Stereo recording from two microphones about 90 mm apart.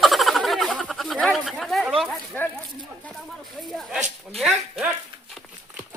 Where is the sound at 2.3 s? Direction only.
20° left (ahead or behind).